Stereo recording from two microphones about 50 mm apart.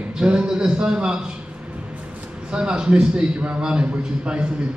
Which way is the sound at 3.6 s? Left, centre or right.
Centre.